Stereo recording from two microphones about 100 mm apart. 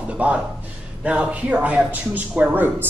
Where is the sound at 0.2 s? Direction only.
15° right (ahead or behind).